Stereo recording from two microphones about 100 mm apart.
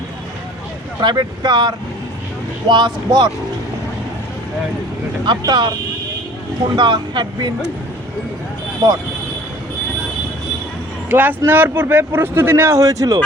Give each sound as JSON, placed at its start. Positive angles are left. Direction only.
{"t": 1.0, "sound": "speech", "side_deg": -45}
{"t": 5.4, "sound": "speech", "side_deg": -45}
{"t": 6.7, "sound": "speech", "side_deg": -50}
{"t": 8.8, "sound": "speech", "side_deg": -40}
{"t": 11.1, "sound": "speech", "side_deg": -20}